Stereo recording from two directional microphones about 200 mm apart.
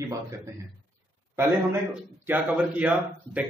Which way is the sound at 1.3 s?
10° right (ahead or behind).